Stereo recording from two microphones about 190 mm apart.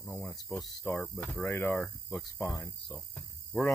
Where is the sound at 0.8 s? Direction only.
10° left (ahead or behind).